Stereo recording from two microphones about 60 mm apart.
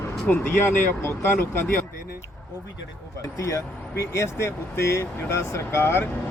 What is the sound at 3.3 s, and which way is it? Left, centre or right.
Speech, left.